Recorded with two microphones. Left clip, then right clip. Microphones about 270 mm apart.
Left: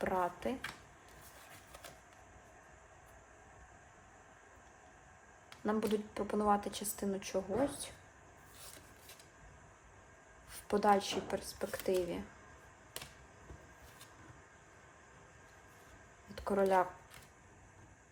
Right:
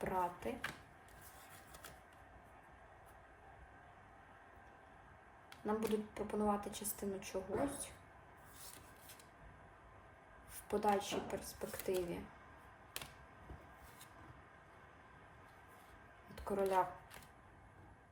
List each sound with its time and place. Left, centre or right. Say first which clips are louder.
0.0 s a sound: left 4 dB; left
5.6 s speech: left 3 dB; left
10.5 s speech: left 6 dB; left
16.3 s speech: left 5 dB; left